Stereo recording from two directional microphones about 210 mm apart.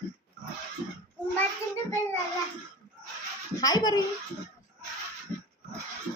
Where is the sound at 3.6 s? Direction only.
20° left (ahead or behind).